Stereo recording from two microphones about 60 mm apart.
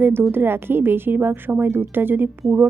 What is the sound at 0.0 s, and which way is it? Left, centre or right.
A woman's voice, right.